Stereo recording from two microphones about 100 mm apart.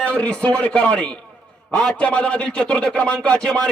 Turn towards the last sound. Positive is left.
turn(degrees=10)  # may be behind; listen again after turning